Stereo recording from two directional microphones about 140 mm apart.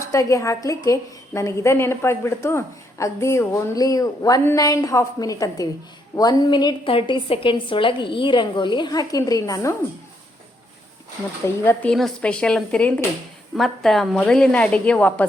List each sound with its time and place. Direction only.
0.0 s a woman's voice: 20° left (ahead or behind)
11.4 s a woman's voice: 15° left (ahead or behind)